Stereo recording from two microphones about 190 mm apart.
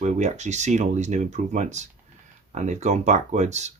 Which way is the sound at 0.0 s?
35° right (ahead or behind).